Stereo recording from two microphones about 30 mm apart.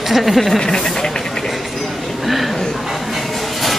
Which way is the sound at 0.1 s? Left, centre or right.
Centre.